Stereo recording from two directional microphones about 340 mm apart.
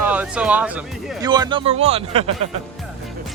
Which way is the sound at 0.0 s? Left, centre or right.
Centre.